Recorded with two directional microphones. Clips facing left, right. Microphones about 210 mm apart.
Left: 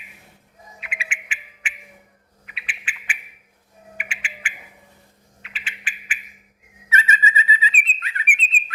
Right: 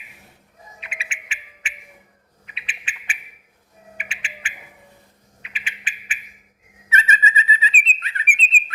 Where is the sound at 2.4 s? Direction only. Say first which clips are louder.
Left 1 dB; 25° right (ahead or behind).